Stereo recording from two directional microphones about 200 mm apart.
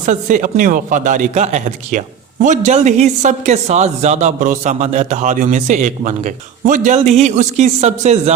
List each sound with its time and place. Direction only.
0.0 s speech: 40° right (ahead or behind)